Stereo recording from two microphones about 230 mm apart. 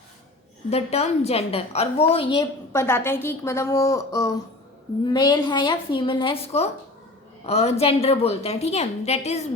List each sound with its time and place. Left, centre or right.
0.7 s a woman's voice: left
2.8 s a woman's voice: centre; by 9.5 s left